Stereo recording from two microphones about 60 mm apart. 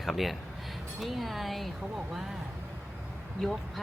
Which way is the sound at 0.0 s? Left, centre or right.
Centre.